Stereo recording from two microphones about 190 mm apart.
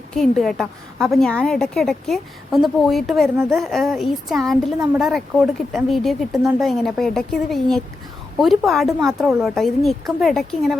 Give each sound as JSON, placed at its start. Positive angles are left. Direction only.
{"t": 0.1, "sound": "a woman's voice", "side_deg": 0}